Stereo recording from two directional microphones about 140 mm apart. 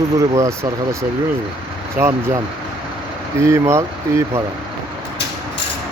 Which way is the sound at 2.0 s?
15° right (ahead or behind).